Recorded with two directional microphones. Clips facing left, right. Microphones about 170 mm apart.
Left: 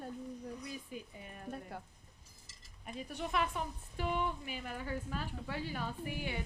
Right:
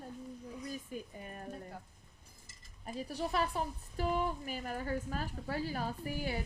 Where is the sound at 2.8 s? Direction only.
35° right (ahead or behind).